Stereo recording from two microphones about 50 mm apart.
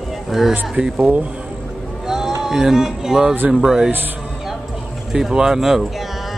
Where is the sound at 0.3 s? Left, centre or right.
Centre.